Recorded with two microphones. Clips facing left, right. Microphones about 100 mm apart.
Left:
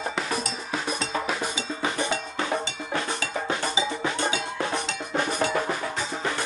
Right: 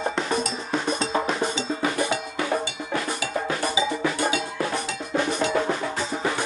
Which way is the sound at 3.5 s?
25° left (ahead or behind).